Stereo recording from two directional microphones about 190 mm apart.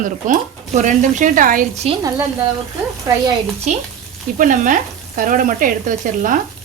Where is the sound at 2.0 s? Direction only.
15° right (ahead or behind).